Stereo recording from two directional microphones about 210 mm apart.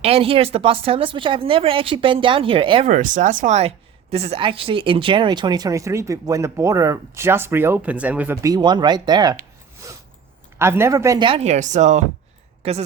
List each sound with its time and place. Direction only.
0.0 s speech: 30° right (ahead or behind)
2.8 s speech: 35° right (ahead or behind); by 9.4 s 20° right (ahead or behind)
9.8 s creak: 15° right (ahead or behind)
10.6 s speech: 10° right (ahead or behind); by 12.8 s 30° right (ahead or behind)